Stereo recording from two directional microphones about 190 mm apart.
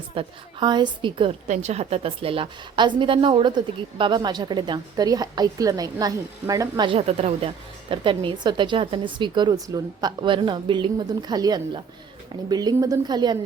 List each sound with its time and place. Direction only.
0.1 s a woman's voice: 25° right (ahead or behind)